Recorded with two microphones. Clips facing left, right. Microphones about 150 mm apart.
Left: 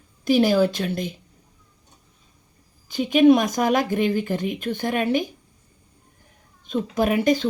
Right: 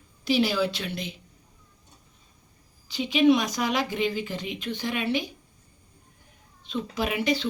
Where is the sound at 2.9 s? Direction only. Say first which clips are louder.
Left 5 dB; 50° left (ahead or behind).